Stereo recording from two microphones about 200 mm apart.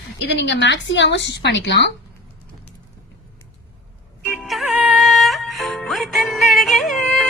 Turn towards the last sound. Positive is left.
turn(degrees=0)  # may be behind; listen again after turning